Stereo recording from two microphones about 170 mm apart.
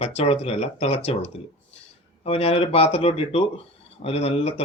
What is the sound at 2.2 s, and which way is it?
Speech, 35° left (ahead or behind).